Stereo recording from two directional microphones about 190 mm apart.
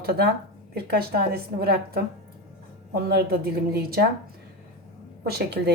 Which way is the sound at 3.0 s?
55° right (ahead or behind).